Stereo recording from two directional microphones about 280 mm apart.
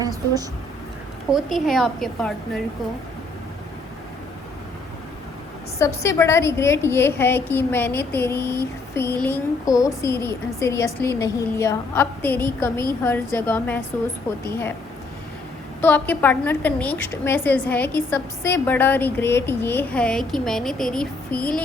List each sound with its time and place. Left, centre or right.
1.3 s a woman's voice: centre
5.8 s a woman's voice: centre
15.8 s a woman's voice: centre